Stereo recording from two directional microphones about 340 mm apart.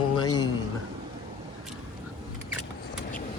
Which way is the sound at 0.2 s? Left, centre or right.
Centre.